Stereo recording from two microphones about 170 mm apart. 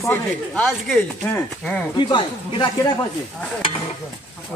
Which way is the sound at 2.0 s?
25° left (ahead or behind).